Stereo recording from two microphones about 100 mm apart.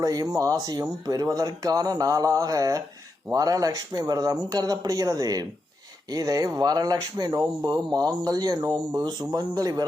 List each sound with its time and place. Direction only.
0.0 s speech: 35° right (ahead or behind)